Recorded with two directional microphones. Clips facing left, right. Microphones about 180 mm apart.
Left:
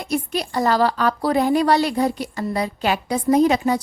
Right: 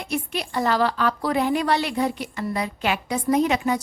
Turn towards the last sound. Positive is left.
turn(degrees=35)  # may be behind; listen again after turning